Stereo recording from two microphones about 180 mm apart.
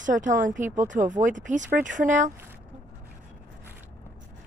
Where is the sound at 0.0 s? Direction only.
45° right (ahead or behind).